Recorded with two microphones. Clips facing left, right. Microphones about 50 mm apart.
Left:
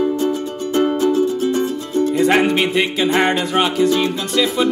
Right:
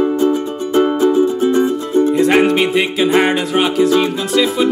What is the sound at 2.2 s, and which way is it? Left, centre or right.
Music, centre.